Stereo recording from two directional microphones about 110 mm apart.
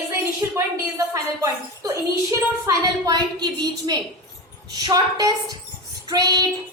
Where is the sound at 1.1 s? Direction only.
25° right (ahead or behind).